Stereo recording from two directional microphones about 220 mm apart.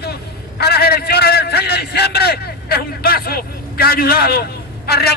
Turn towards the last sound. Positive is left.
turn(degrees=45)  # may be behind; listen again after turning